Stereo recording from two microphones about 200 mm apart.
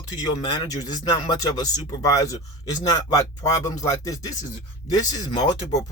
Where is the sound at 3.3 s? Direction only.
15° left (ahead or behind).